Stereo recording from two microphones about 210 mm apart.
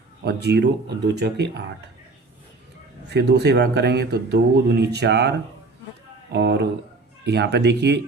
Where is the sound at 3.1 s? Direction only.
50° right (ahead or behind).